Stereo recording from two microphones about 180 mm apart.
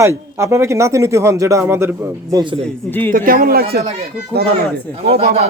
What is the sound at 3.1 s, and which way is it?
Speech, 50° right (ahead or behind).